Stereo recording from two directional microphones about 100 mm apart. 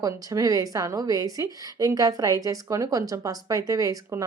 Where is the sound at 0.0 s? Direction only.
35° right (ahead or behind).